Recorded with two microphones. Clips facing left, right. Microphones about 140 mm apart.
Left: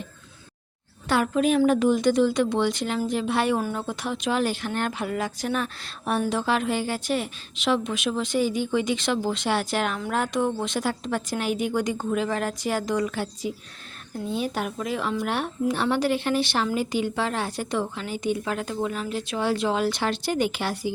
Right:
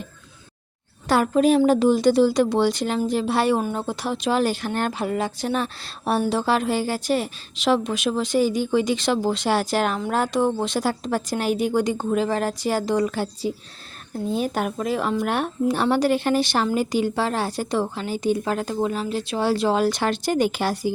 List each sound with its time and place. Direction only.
1.0 s speech: 40° right (ahead or behind)
15.6 s speech: 40° right (ahead or behind)